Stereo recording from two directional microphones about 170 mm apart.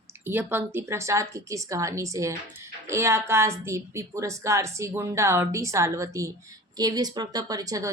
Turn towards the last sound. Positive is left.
turn(degrees=-20)  # may be behind; listen again after turning